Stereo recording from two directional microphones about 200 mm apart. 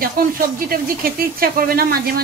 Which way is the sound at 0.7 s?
45° right (ahead or behind).